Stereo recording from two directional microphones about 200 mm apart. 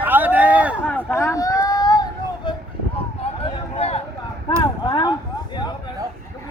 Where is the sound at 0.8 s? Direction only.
10° left (ahead or behind).